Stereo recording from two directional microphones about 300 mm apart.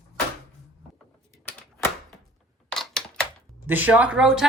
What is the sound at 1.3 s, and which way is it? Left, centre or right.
Typewriter, centre.